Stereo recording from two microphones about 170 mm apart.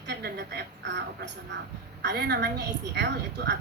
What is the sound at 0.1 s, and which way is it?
A woman's voice, 75° right (ahead or behind).